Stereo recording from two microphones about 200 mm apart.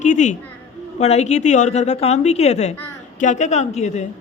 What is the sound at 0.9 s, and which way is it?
A woman's voice, 35° left (ahead or behind).